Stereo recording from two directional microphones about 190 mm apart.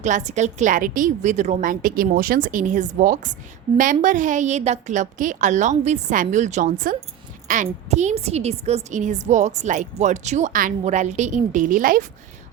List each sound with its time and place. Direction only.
0.0 s a woman's voice: 40° right (ahead or behind)